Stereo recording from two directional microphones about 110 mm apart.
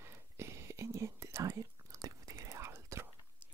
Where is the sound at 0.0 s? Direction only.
25° right (ahead or behind).